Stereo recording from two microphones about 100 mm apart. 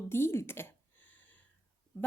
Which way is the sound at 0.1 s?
25° left (ahead or behind).